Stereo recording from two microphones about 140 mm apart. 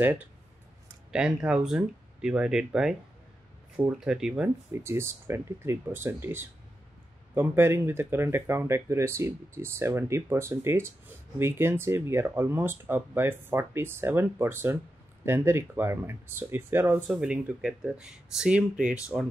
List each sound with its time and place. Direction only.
0.0 s speech: 10° right (ahead or behind)
4.8 s speech: 20° right (ahead or behind)
17.1 s speech: 5° right (ahead or behind)